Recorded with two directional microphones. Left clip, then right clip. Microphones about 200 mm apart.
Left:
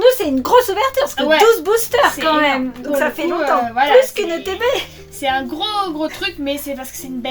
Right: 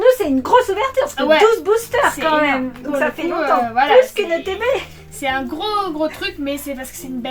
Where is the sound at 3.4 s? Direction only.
Centre (ahead or behind).